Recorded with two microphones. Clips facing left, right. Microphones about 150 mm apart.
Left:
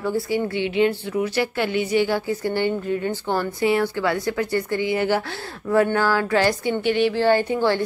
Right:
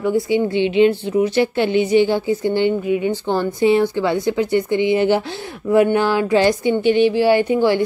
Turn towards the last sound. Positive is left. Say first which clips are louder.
# right 4 dB
turn(degrees=-15)  # may be behind; listen again after turning